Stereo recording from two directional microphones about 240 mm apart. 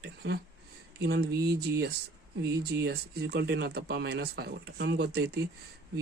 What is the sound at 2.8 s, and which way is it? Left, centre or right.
Speech, right.